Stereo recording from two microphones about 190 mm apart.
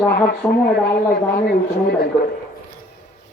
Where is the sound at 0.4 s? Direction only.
15° left (ahead or behind).